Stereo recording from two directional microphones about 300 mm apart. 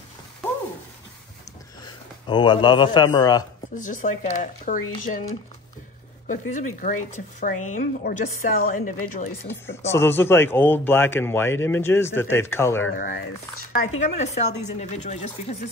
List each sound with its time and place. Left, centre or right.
2.2 s speech: centre
3.7 s a woman's voice: left
9.5 s speech: centre
12.9 s a woman's voice: left